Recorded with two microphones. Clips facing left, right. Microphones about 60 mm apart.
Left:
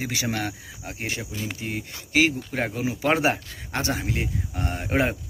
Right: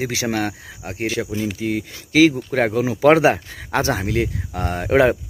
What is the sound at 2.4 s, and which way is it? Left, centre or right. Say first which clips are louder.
Speech: right 8 dB; right.